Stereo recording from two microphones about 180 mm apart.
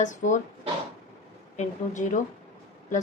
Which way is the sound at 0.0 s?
45° left (ahead or behind).